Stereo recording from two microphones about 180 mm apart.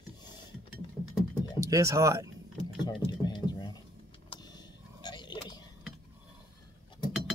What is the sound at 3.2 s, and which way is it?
Typing, 25° left (ahead or behind).